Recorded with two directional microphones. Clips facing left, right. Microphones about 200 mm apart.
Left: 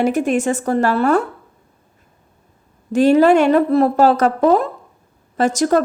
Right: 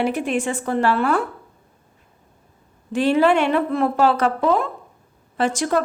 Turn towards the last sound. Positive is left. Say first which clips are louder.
# left 5 dB
turn(degrees=40)  # may be behind; listen again after turning